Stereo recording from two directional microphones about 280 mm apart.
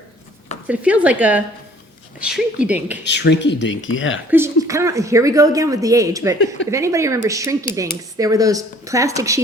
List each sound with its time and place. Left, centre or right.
0.7 s speech: centre
3.0 s speech: left
4.3 s speech: centre